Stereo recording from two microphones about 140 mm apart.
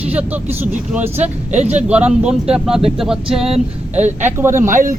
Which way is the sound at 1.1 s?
50° right (ahead or behind).